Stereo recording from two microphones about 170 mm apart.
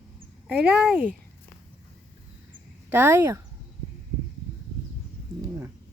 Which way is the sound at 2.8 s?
10° right (ahead or behind).